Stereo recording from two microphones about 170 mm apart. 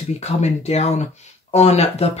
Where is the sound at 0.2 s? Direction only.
40° left (ahead or behind).